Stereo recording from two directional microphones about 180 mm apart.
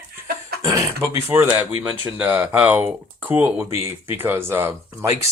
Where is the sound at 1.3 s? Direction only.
15° right (ahead or behind).